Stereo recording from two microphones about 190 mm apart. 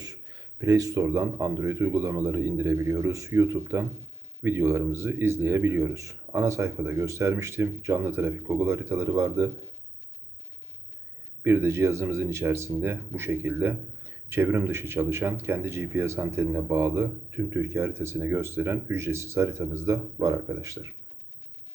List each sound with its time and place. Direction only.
0.0 s speech: 20° right (ahead or behind)
11.4 s speech: 15° right (ahead or behind)